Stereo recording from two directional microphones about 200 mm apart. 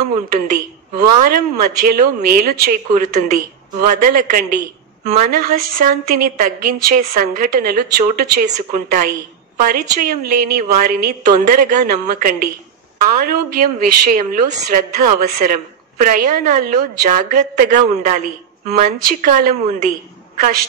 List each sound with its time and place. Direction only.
0.3 s a woman's voice: 40° right (ahead or behind)